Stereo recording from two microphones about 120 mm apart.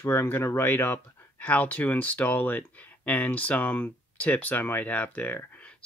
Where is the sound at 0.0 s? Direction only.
20° left (ahead or behind).